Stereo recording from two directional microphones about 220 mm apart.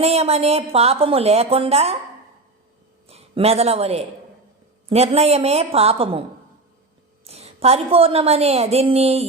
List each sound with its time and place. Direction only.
0.0 s a woman's voice: 30° right (ahead or behind)
3.1 s a man's voice: 25° right (ahead or behind)
7.3 s a woman's voice: 30° right (ahead or behind)